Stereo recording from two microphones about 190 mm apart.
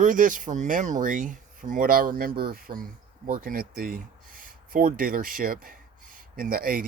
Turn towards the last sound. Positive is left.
turn(degrees=-50)  # may be behind; listen again after turning